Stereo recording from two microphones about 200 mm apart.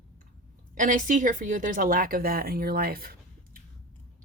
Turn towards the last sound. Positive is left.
turn(degrees=-45)  # may be behind; listen again after turning